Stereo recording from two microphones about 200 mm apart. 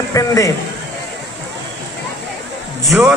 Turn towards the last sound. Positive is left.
turn(degrees=-5)  # may be behind; listen again after turning